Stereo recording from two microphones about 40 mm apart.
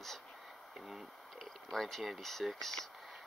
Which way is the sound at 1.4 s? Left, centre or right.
Centre.